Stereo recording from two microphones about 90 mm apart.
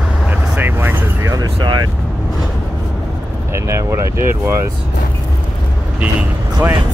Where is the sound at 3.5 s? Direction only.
30° right (ahead or behind).